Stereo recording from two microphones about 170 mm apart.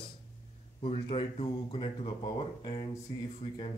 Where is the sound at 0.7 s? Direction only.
30° left (ahead or behind).